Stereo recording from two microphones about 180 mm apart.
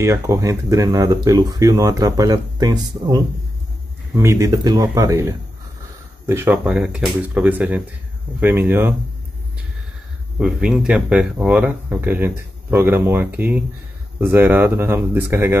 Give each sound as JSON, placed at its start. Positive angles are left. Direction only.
{"t": 0.0, "sound": "speech", "side_deg": -15}
{"t": 10.4, "sound": "speech", "side_deg": -5}